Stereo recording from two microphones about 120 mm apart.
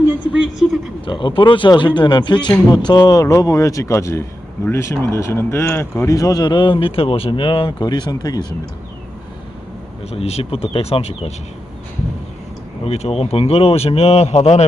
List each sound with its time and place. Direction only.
1.0 s speech: 45° left (ahead or behind)
10.0 s speech: 60° left (ahead or behind)
12.8 s speech: 60° left (ahead or behind)